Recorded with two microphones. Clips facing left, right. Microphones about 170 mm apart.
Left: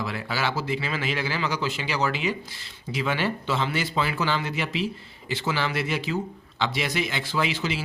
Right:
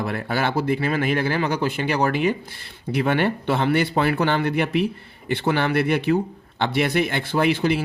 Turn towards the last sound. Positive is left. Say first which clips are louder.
# right 7 dB
turn(degrees=-55)  # may be behind; listen again after turning